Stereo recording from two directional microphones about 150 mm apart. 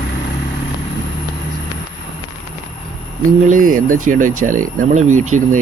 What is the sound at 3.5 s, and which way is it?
Speech, 65° right (ahead or behind).